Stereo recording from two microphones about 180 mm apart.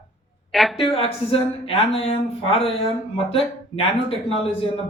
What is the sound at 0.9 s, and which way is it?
Speech, 30° left (ahead or behind).